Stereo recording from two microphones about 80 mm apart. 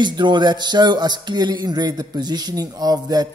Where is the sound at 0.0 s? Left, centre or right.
Right.